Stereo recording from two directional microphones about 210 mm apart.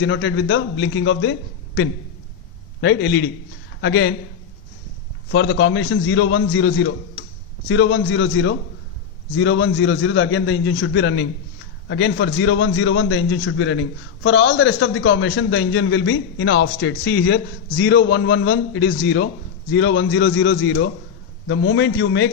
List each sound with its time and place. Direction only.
0.0 s a man's voice: 65° left (ahead or behind)
2.8 s a man's voice: 50° left (ahead or behind)
5.3 s a man's voice: 55° left (ahead or behind)